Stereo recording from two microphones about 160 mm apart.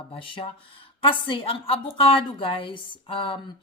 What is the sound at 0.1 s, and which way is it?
A woman's voice, 35° left (ahead or behind).